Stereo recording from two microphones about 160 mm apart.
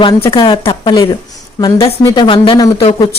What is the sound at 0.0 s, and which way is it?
A woman's voice, 35° left (ahead or behind).